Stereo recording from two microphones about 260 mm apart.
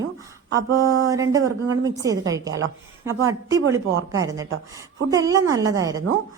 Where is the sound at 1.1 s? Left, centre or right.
Centre.